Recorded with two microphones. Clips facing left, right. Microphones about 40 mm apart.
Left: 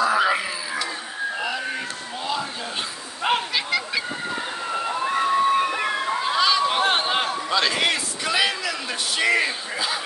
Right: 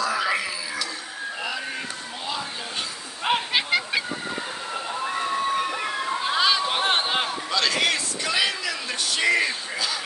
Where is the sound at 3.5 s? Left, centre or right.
Right.